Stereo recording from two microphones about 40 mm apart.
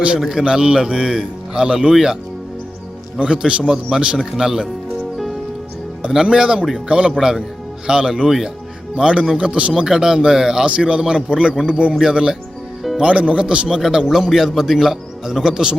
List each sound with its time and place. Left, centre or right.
0.3 s speech: centre
3.2 s a man's voice: right
5.1 s music: centre
6.2 s a man's voice: centre
7.2 s speech: centre
9.0 s a man's voice: right
9.7 s speech: centre
10.7 s a man's voice: right
11.9 s a man's voice: centre
13.7 s speech: centre